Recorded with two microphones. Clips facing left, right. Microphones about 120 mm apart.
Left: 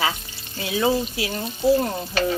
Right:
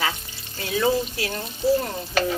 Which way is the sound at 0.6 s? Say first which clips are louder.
Left 1 dB; 10° left (ahead or behind).